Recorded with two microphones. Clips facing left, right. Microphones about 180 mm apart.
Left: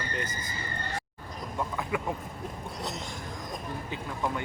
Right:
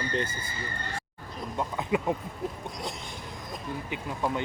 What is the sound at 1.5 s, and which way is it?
Speech, 20° right (ahead or behind).